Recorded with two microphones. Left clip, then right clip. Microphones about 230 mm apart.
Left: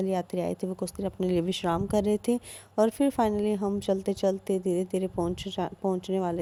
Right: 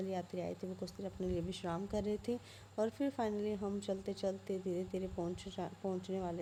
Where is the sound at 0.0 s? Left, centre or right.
Left.